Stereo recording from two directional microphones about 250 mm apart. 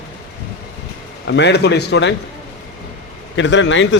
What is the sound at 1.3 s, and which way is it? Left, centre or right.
Speech, left.